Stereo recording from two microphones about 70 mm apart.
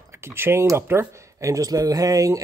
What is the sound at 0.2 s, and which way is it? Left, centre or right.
Speech, right.